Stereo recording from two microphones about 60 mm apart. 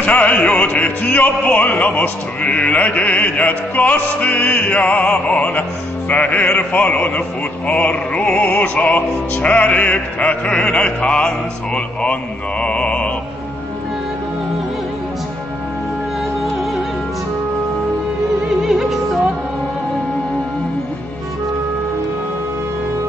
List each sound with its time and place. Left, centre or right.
0.0 s music: left
18.6 s music: centre